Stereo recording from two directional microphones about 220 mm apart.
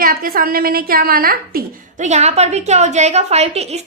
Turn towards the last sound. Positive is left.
turn(degrees=-30)  # may be behind; listen again after turning